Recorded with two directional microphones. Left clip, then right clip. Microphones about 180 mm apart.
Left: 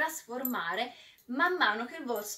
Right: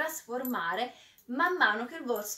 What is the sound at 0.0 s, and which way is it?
A woman's voice, 5° right (ahead or behind).